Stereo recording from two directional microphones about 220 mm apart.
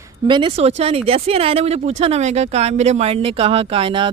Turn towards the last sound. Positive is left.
turn(degrees=-25)  # may be behind; listen again after turning